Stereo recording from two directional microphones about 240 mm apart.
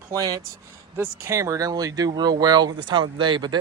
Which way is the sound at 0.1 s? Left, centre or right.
Centre.